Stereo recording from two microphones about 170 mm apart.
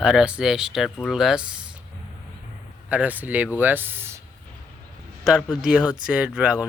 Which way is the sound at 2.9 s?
10° right (ahead or behind).